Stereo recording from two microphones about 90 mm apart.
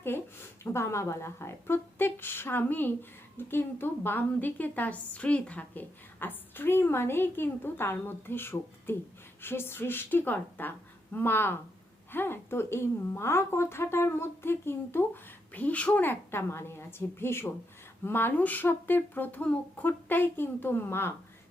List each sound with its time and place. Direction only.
0.0 s a woman's voice: 25° left (ahead or behind)